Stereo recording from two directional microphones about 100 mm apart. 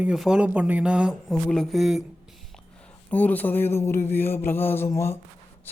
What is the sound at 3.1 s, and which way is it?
A man's voice, 15° left (ahead or behind).